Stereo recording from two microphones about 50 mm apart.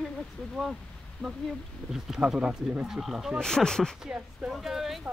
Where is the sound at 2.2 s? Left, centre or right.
Centre.